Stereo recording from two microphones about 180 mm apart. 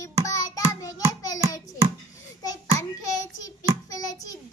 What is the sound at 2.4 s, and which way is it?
Child singing, 20° left (ahead or behind).